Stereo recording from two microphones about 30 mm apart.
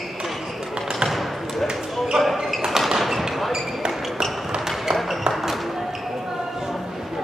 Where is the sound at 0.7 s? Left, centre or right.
Centre.